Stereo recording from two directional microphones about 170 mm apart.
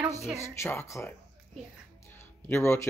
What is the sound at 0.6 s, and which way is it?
Speech, 15° left (ahead or behind).